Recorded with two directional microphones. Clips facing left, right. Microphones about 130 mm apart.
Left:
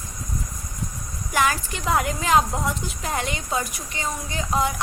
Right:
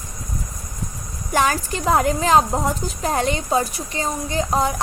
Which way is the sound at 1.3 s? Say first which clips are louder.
Right 3 dB; 35° right (ahead or behind).